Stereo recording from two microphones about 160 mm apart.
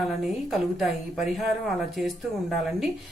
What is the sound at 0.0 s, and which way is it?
A woman's voice, centre (ahead or behind).